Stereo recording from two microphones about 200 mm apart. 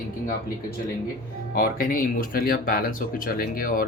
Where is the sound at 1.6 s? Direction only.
45° left (ahead or behind).